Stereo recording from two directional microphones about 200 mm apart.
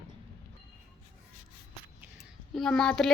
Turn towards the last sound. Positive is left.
turn(degrees=0)  # may be behind; listen again after turning